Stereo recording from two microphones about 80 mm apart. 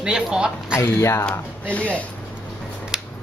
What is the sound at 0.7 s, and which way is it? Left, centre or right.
Speech, left.